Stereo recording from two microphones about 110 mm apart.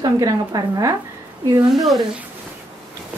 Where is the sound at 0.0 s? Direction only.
35° right (ahead or behind).